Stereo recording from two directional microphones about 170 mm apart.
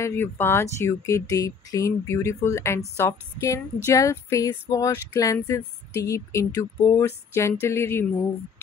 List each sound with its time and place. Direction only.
0.0 s speech: 15° left (ahead or behind)
3.0 s a sound: 15° left (ahead or behind)
7.6 s speech: 15° left (ahead or behind)